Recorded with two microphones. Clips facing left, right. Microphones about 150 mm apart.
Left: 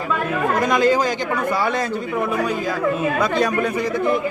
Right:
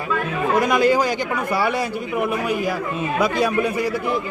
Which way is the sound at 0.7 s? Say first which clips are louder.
Left 1 dB; 10° right (ahead or behind).